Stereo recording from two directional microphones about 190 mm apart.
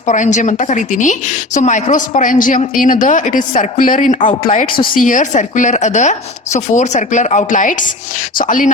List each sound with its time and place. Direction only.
0.0 s a woman's voice: 40° left (ahead or behind)